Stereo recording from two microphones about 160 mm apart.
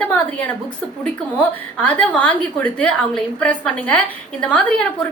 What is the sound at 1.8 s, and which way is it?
A woman's voice, 10° left (ahead or behind).